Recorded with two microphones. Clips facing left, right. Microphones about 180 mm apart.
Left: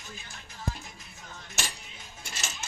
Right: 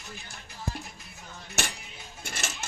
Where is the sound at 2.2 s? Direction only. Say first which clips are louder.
Right 4 dB; 55° right (ahead or behind).